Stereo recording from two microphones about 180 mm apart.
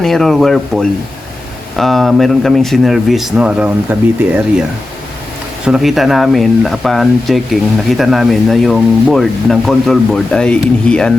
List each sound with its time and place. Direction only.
0.0 s speech: centre (ahead or behind)
5.6 s speech: 5° right (ahead or behind)